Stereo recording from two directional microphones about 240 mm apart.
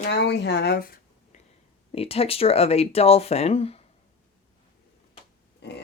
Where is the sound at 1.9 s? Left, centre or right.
Left.